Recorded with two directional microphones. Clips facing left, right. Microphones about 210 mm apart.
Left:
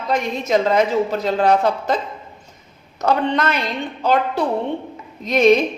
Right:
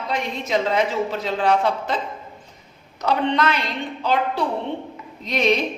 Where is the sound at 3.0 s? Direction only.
45° left (ahead or behind).